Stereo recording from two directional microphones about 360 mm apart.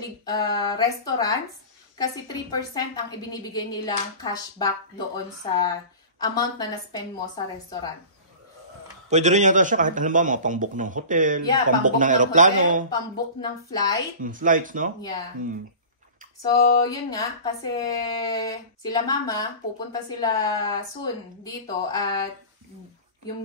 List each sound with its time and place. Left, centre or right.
0.2 s a woman's voice: centre
9.1 s a man's voice: centre
12.9 s a woman's voice: centre
14.2 s a man's voice: right
16.5 s a sound: left
16.8 s a woman's voice: centre